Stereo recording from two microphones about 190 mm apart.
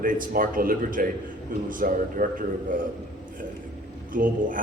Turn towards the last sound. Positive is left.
turn(degrees=-45)  # may be behind; listen again after turning